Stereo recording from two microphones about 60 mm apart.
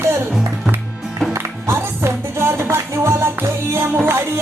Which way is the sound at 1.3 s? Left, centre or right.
Right.